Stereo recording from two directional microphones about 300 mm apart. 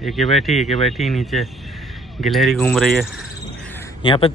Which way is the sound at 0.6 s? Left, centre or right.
Left.